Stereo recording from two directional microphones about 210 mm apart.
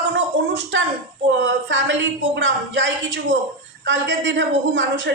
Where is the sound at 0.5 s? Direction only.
60° right (ahead or behind).